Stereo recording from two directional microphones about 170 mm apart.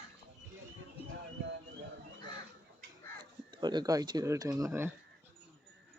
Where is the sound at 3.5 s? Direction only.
25° right (ahead or behind).